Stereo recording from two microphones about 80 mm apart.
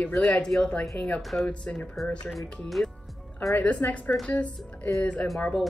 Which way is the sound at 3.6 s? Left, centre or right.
Centre.